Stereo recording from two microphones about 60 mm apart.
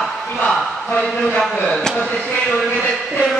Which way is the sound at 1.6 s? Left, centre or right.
Centre.